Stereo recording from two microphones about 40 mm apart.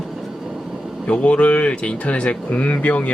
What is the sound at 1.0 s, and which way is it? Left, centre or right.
Speech, left.